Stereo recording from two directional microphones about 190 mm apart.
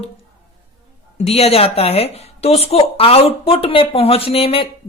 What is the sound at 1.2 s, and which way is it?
Speech, 30° left (ahead or behind).